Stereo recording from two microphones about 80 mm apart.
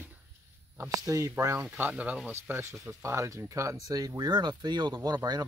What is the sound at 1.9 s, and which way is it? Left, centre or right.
Speech, centre.